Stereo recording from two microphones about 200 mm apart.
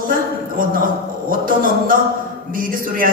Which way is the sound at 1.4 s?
45° right (ahead or behind).